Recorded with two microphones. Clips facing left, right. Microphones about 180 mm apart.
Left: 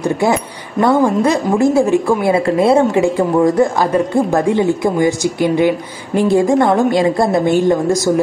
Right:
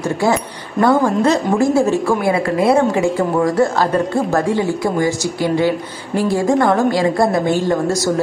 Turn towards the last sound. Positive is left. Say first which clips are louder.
# left 4 dB
turn(degrees=20)  # may be behind; listen again after turning